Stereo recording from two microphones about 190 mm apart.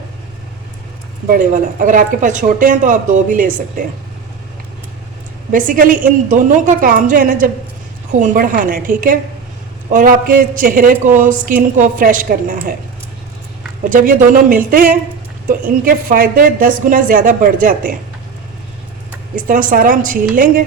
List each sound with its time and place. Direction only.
1.3 s a woman's voice: 45° right (ahead or behind)
5.5 s a woman's voice: 45° right (ahead or behind)
13.9 s a woman's voice: 45° right (ahead or behind)
15.8 s a woman's voice: 45° right (ahead or behind)
19.4 s a woman's voice: 45° right (ahead or behind)